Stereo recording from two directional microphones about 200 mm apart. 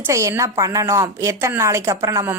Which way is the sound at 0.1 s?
15° right (ahead or behind).